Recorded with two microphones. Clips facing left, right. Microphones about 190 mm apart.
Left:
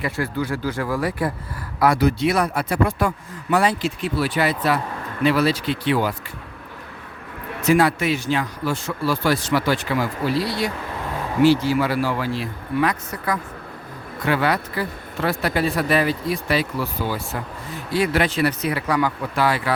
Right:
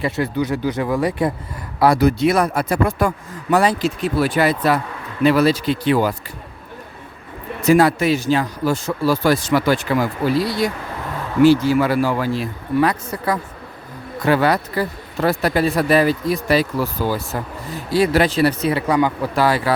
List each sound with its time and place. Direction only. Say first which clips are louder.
0.0 s speech: right 4 dB; 20° right (ahead or behind)
2.0 s speech: right 3 dB; 45° right (ahead or behind)
7.7 s speech: right 4 dB; 40° right (ahead or behind); by 19.3 s 25° right (ahead or behind)
19.4 s speech: right 3 dB; 35° right (ahead or behind)